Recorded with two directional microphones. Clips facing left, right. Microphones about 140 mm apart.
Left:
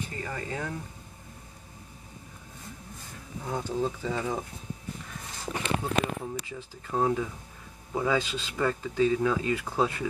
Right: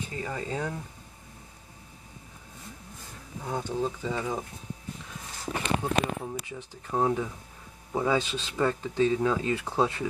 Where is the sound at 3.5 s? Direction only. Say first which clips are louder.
Even; 10° right (ahead or behind).